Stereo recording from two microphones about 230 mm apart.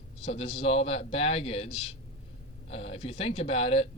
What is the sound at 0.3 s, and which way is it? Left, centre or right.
Speech, left.